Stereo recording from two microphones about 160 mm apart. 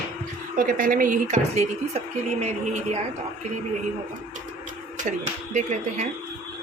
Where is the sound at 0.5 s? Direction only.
60° right (ahead or behind); by 2.0 s 45° right (ahead or behind).